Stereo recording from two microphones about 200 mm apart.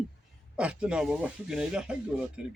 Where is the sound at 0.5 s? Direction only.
5° right (ahead or behind).